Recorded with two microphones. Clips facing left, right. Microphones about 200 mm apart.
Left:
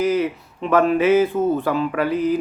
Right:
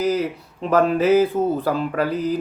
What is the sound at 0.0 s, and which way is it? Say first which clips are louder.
Speech: left 2 dB; 35° right (ahead or behind).